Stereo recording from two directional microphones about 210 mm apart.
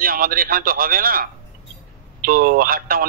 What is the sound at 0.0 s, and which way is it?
Speech, 45° right (ahead or behind).